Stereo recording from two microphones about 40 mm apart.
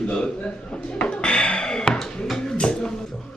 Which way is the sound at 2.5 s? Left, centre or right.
Left.